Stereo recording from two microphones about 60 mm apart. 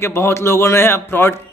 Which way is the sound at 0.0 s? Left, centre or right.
Left.